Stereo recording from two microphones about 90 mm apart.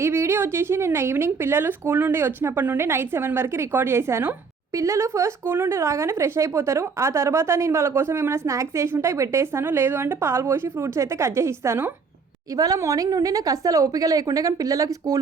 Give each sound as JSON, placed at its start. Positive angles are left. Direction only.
{"t": 0.0, "sound": "a woman's voice", "side_deg": -30}